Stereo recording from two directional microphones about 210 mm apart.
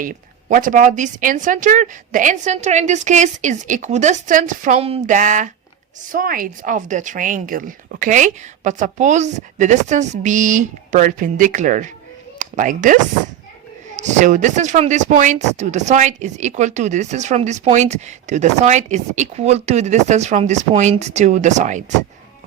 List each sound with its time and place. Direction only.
0.0 s speech: 40° right (ahead or behind)